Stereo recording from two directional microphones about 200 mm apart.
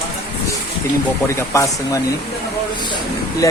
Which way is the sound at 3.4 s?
15° left (ahead or behind).